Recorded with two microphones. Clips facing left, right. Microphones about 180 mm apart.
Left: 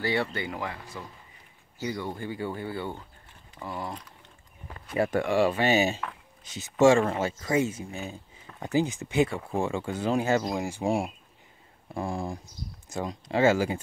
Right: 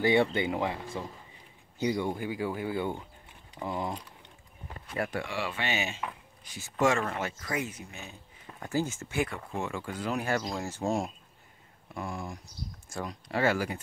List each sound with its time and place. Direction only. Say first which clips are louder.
0.0 s speech: right 4 dB; 20° right (ahead or behind)
5.1 s speech: left 10 dB; 45° left (ahead or behind)
6.4 s speech: left 7 dB; 20° left (ahead or behind)
8.5 s speech: left 5 dB; 20° left (ahead or behind)
10.5 s speech: left 3 dB; 15° left (ahead or behind)
11.9 s speech: left 5 dB; 30° left (ahead or behind)